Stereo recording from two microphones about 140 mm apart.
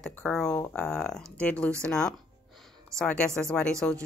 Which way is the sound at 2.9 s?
5° left (ahead or behind).